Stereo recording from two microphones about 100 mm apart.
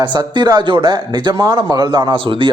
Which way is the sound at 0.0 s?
50° right (ahead or behind).